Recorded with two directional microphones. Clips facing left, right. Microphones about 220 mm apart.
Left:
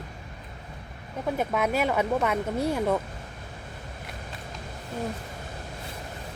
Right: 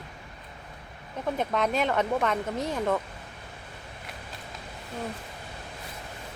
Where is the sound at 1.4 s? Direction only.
10° left (ahead or behind).